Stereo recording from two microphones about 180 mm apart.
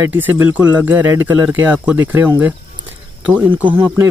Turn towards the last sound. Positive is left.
turn(degrees=-25)  # may be behind; listen again after turning